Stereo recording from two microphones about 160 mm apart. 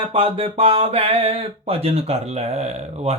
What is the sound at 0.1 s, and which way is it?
Speech, 35° right (ahead or behind).